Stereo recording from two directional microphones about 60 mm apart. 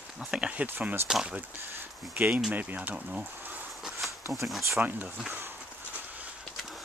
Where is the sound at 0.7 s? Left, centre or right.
Right.